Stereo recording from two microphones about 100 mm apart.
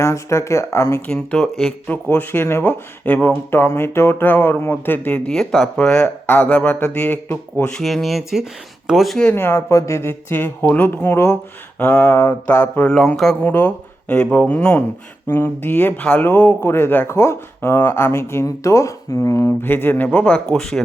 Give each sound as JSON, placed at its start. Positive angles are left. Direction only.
{"t": 0.0, "sound": "speech", "side_deg": 30}
{"t": 1.0, "sound": "speech", "side_deg": 10}
{"t": 1.9, "sound": "speech", "side_deg": 15}
{"t": 6.2, "sound": "speech", "side_deg": 20}
{"t": 7.6, "sound": "speech", "side_deg": 5}
{"t": 9.3, "sound": "speech", "side_deg": 25}
{"t": 19.5, "sound": "speech", "side_deg": 20}